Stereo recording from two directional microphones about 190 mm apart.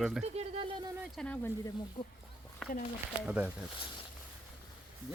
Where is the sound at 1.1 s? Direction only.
10° left (ahead or behind).